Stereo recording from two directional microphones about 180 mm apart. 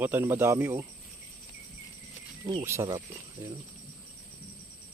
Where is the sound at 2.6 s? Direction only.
15° right (ahead or behind).